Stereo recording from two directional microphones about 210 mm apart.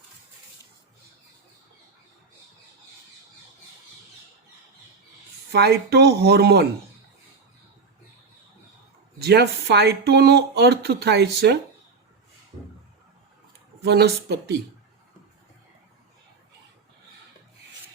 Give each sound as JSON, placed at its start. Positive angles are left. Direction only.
{"t": 5.5, "sound": "speech", "side_deg": -50}
{"t": 9.2, "sound": "speech", "side_deg": -50}
{"t": 13.8, "sound": "speech", "side_deg": -50}